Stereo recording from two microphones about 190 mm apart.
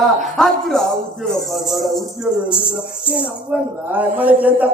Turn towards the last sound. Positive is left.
turn(degrees=-10)  # may be behind; listen again after turning